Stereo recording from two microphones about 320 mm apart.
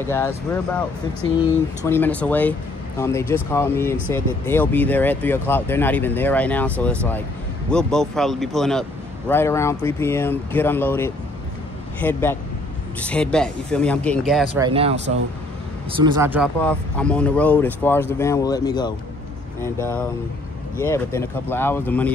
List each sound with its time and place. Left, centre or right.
0.1 s speech: centre
1.9 s speech: centre
7.7 s speech: centre
14.6 s speech: centre
16.6 s speech: centre